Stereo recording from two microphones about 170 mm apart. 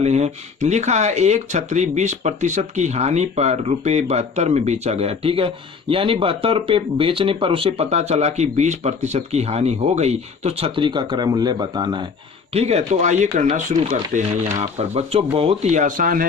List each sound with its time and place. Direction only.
0.0 s speech: 40° right (ahead or behind); by 12.0 s 25° right (ahead or behind)
12.5 s speech: 40° right (ahead or behind)
14.8 s speech: 40° right (ahead or behind)